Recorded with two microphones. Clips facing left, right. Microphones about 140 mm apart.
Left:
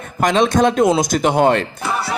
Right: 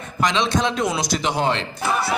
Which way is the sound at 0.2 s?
50° left (ahead or behind).